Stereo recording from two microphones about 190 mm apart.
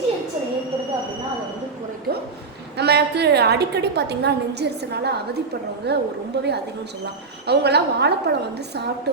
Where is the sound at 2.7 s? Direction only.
60° right (ahead or behind).